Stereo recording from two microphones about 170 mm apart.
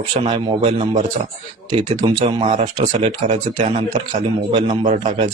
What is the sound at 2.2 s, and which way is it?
Speech, 40° right (ahead or behind).